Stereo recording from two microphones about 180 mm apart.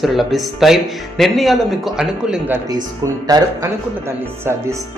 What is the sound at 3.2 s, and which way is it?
Speech, 20° right (ahead or behind).